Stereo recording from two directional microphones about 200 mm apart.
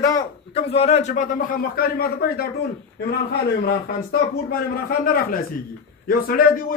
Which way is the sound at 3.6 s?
50° left (ahead or behind).